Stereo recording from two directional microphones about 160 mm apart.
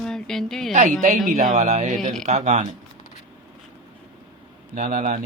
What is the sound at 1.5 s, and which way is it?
Speech, 50° right (ahead or behind).